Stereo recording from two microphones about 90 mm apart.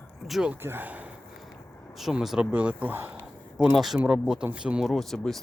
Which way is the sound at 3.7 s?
Centre (ahead or behind).